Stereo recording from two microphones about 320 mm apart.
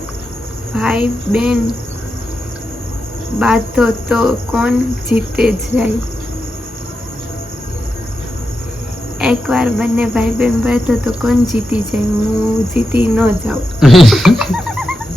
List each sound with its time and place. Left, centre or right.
0.7 s a woman's voice: centre
3.3 s speech: centre
9.1 s speech: centre